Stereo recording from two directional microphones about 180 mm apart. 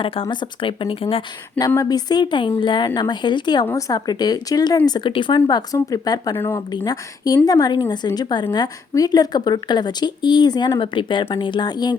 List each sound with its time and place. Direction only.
0.0 s a woman's voice: 30° left (ahead or behind)